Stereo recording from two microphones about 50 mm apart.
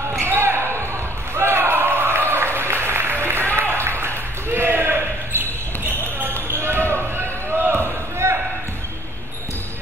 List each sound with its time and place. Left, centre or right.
0.2 s basketball bounce: right
1.3 s applause: right
4.0 s basketball bounce: right
6.5 s basketball bounce: right